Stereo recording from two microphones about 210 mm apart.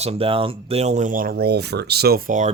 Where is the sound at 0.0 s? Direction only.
30° right (ahead or behind).